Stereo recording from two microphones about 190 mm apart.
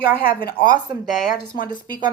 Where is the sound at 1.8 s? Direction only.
25° right (ahead or behind).